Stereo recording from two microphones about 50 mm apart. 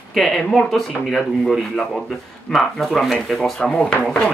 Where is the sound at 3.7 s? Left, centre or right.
Left.